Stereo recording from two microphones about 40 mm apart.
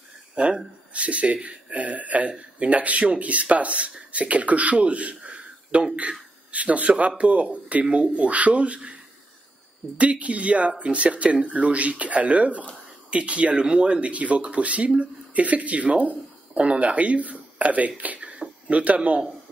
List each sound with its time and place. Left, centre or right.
0.9 s a man's voice: right
9.9 s a man's voice: right